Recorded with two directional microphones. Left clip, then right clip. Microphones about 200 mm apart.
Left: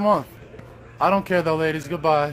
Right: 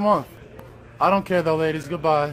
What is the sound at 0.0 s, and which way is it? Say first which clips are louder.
A man's voice: even; 10° right (ahead or behind).